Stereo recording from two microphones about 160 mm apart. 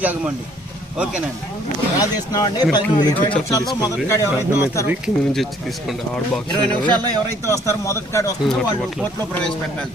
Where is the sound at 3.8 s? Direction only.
20° left (ahead or behind).